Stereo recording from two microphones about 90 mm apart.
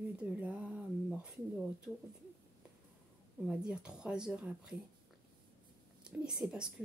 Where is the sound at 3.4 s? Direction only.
10° right (ahead or behind).